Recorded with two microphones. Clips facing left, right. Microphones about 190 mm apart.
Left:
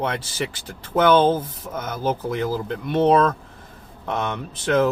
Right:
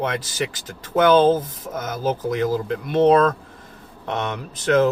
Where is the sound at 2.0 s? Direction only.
Centre (ahead or behind).